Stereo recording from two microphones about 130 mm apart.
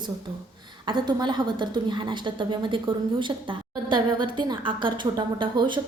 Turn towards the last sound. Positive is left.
turn(degrees=-40)  # may be behind; listen again after turning